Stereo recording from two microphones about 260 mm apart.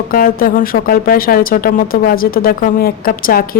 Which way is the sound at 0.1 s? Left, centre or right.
Left.